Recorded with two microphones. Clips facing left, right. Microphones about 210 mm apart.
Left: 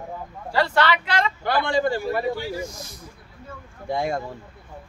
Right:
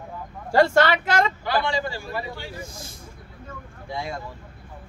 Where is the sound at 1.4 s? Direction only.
55° left (ahead or behind).